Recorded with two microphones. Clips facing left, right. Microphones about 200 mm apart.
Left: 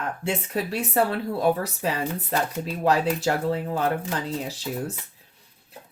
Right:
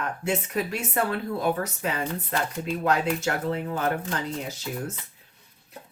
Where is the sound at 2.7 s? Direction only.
35° left (ahead or behind).